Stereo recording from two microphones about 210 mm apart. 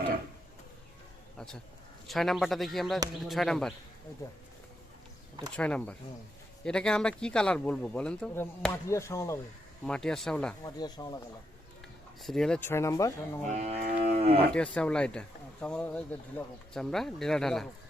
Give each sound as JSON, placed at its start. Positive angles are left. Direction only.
{"t": 1.4, "sound": "a sound", "side_deg": 5}
{"t": 2.0, "sound": "speech", "side_deg": 0}
{"t": 5.5, "sound": "speech", "side_deg": 5}
{"t": 9.8, "sound": "speech", "side_deg": 5}
{"t": 10.6, "sound": "speech", "side_deg": 20}
{"t": 12.2, "sound": "speech", "side_deg": 0}
{"t": 13.5, "sound": "a sound", "side_deg": -30}
{"t": 13.8, "sound": "livestock", "side_deg": -45}
{"t": 14.1, "sound": "cattle", "side_deg": -30}
{"t": 14.5, "sound": "speech", "side_deg": 5}